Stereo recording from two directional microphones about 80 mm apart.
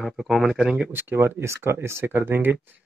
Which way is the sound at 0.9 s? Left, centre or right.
Right.